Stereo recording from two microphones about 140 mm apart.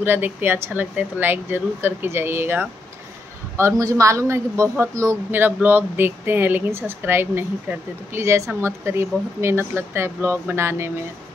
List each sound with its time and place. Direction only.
0.0 s a woman's voice: 15° right (ahead or behind)